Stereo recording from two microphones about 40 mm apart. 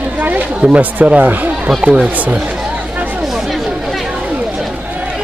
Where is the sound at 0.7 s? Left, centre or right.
Right.